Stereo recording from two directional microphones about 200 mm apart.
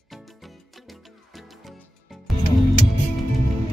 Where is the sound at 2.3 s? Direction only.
Centre (ahead or behind).